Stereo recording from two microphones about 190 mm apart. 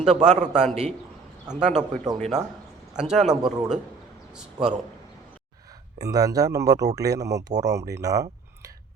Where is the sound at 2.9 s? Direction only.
5° right (ahead or behind).